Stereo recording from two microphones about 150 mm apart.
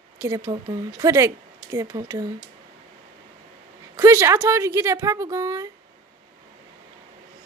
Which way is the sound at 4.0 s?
20° right (ahead or behind).